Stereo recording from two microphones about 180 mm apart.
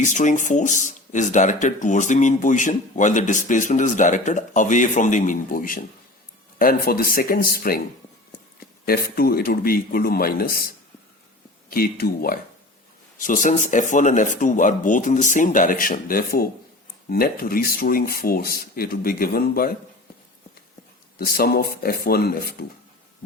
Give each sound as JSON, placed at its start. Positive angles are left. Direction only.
{"t": 0.0, "sound": "speech", "side_deg": 45}
{"t": 8.9, "sound": "speech", "side_deg": 55}
{"t": 11.7, "sound": "speech", "side_deg": 60}
{"t": 13.1, "sound": "speech", "side_deg": 45}
{"t": 21.2, "sound": "speech", "side_deg": 55}